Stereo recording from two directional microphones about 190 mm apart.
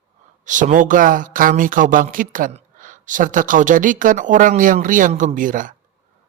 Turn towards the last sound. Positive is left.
turn(degrees=-45)  # may be behind; listen again after turning